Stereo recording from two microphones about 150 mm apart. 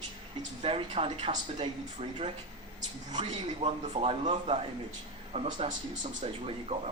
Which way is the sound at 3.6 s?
40° right (ahead or behind).